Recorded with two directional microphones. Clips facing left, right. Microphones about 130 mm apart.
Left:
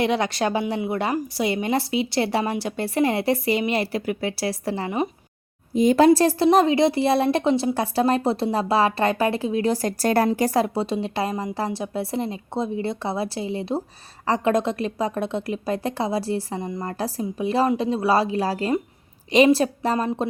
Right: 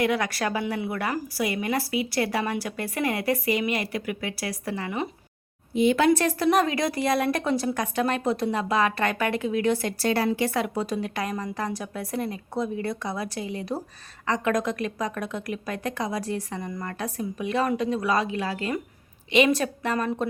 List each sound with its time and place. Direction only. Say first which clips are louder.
0.0 s a woman's voice: left 3 dB; 25° left (ahead or behind)
5.7 s a woman's voice: left 5 dB; 40° left (ahead or behind)